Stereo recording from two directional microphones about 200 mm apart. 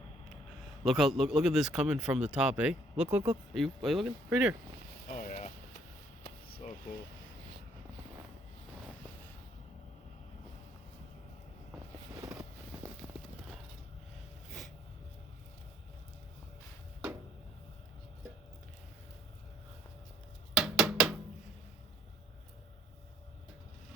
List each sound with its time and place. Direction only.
0.9 s speech: centre (ahead or behind)
5.1 s a sound: 40° left (ahead or behind)
13.0 s clip-clop: 15° right (ahead or behind)
20.6 s drum: 5° right (ahead or behind)